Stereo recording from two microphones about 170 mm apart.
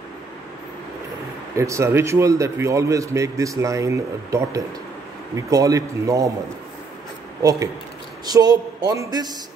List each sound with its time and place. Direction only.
1.6 s a man's voice: 15° right (ahead or behind)
7.4 s a man's voice: 20° right (ahead or behind)